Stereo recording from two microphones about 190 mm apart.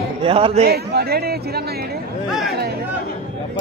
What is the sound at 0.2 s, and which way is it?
Speech, 30° right (ahead or behind).